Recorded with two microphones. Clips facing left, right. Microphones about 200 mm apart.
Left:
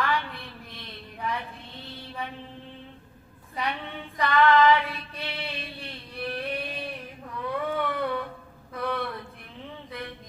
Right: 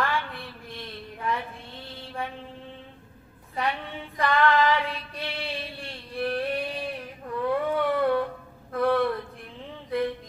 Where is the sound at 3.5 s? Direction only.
50° right (ahead or behind).